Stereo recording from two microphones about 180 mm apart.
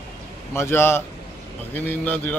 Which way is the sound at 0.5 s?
15° left (ahead or behind).